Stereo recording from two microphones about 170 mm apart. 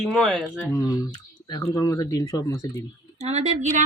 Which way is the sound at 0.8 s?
20° left (ahead or behind).